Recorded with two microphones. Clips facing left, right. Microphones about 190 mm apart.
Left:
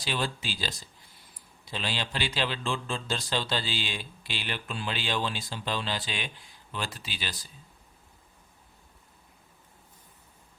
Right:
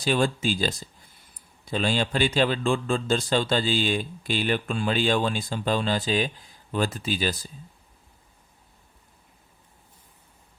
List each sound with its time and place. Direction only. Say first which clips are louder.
0.0 s a man's voice: right 9 dB; 45° right (ahead or behind)